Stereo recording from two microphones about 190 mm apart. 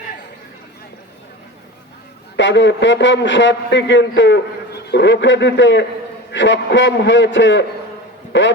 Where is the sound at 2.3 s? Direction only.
70° left (ahead or behind).